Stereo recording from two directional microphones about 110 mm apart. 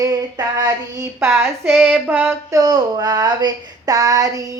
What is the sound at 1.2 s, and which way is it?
Child singing, 20° right (ahead or behind).